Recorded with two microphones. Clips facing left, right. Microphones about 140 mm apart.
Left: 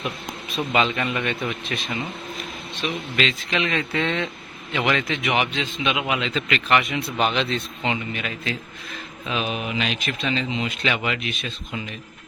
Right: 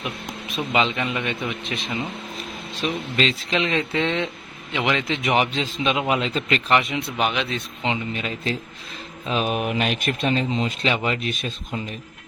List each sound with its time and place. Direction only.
0.5 s a man's voice: 15° right (ahead or behind)
2.8 s a man's voice: 35° right (ahead or behind)
7.2 s a man's voice: 10° right (ahead or behind)
7.9 s speech: 30° right (ahead or behind)
9.2 s speech: 40° right (ahead or behind)